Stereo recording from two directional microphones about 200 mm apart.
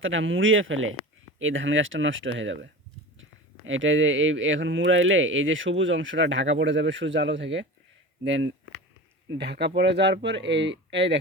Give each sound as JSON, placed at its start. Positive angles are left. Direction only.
{"t": 0.0, "sound": "speech", "side_deg": -75}
{"t": 3.7, "sound": "speech", "side_deg": -70}